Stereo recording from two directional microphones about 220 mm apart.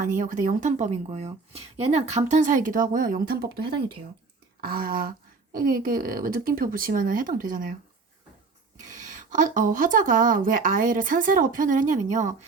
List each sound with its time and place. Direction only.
0.0 s speech: 35° right (ahead or behind)
4.6 s speech: 40° right (ahead or behind)
8.9 s speech: 35° right (ahead or behind)